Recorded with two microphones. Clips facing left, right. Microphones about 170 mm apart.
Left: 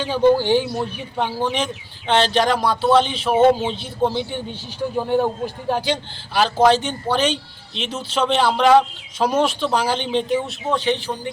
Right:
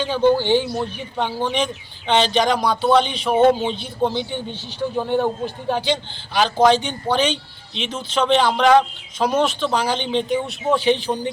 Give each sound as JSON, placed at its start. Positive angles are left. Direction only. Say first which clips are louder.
{"t": 0.0, "sound": "speech", "louder": "left 1 dB", "side_deg": 5}
{"t": 10.8, "sound": "speech", "louder": "right 2 dB", "side_deg": -15}